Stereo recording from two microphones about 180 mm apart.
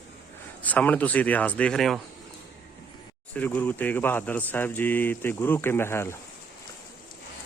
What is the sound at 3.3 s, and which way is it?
Speech, 10° left (ahead or behind).